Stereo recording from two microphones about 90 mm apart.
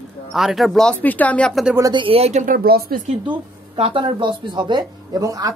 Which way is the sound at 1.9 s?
80° right.